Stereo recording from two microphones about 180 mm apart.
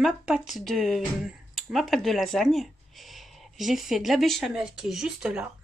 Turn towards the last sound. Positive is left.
turn(degrees=-5)  # may be behind; listen again after turning